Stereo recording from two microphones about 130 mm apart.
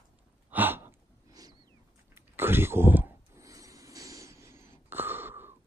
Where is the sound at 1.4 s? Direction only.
30° right (ahead or behind).